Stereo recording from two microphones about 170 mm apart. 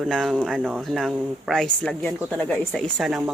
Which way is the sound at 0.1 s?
Centre (ahead or behind).